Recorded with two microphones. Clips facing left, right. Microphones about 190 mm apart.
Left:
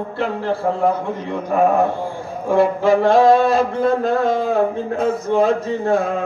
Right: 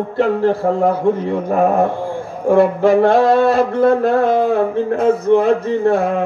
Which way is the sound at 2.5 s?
55° right (ahead or behind).